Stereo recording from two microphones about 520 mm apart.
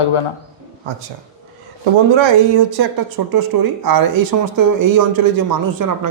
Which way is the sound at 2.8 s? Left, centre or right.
Right.